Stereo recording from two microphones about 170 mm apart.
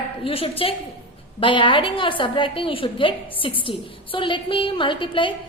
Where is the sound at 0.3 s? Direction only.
35° left (ahead or behind).